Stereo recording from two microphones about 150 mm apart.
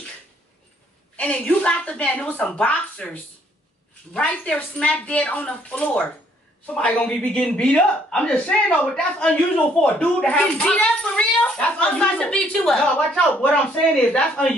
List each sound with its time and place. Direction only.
1.1 s speech: 10° left (ahead or behind)